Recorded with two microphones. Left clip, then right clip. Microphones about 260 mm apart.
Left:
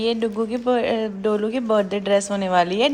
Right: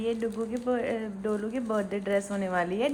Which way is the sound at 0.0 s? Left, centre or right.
Centre.